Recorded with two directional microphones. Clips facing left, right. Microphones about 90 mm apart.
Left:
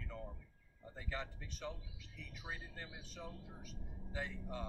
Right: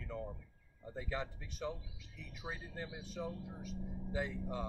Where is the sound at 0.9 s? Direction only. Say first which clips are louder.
Right 5 dB; 15° right (ahead or behind).